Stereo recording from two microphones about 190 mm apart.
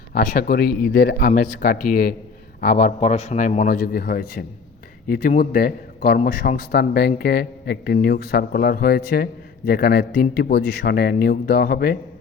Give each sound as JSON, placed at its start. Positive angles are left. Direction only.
{"t": 0.1, "sound": "a man's voice", "side_deg": 50}